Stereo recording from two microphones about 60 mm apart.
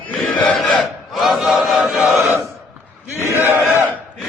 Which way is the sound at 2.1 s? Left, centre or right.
Right.